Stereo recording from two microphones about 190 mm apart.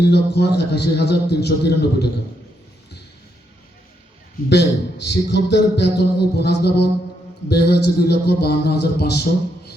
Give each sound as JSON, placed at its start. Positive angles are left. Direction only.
{"t": 0.1, "sound": "a man's voice", "side_deg": 60}
{"t": 4.4, "sound": "a man's voice", "side_deg": 65}